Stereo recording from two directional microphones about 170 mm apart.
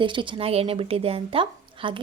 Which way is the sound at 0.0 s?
30° right (ahead or behind).